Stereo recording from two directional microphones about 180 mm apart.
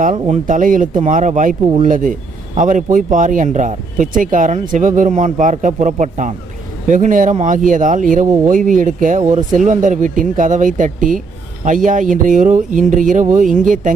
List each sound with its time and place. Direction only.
0.0 s speech: 45° right (ahead or behind)